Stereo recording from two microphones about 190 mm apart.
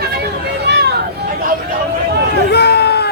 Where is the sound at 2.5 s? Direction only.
60° left (ahead or behind).